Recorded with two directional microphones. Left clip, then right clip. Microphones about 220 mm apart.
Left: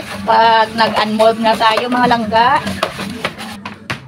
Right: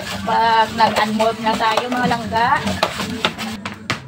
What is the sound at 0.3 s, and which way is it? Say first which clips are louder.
Speech: left 5 dB; 45° left (ahead or behind).